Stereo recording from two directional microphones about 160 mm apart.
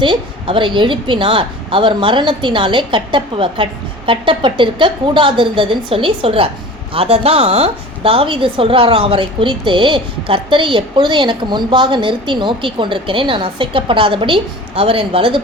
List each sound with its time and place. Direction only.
0.0 s a woman's voice: 30° right (ahead or behind)